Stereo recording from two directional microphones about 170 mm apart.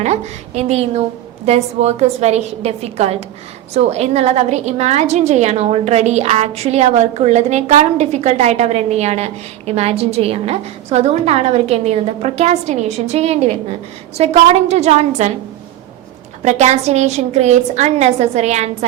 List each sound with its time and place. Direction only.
0.0 s a woman's voice: 40° right (ahead or behind)
16.4 s a woman's voice: 40° right (ahead or behind)